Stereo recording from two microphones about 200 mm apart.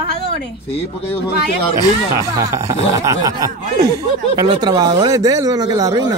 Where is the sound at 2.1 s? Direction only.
15° right (ahead or behind).